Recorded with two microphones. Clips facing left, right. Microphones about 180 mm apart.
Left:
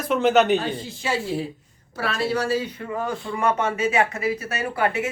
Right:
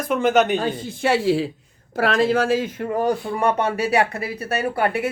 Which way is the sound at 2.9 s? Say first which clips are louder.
Right 6 dB; 50° right (ahead or behind).